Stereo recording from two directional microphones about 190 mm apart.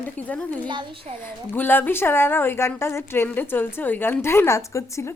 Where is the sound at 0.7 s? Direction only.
25° right (ahead or behind).